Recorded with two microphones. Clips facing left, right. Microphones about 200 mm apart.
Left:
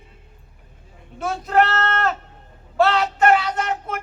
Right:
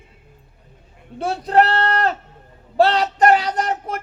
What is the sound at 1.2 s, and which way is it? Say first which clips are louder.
Speech: right 2 dB; 35° right (ahead or behind).